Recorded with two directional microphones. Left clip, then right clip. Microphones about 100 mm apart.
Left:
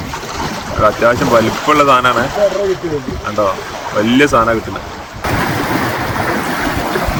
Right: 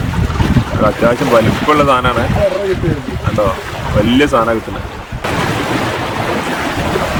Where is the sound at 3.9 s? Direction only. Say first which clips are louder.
Left 1 dB; 5° right (ahead or behind).